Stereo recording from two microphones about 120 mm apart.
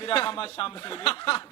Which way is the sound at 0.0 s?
45° left (ahead or behind).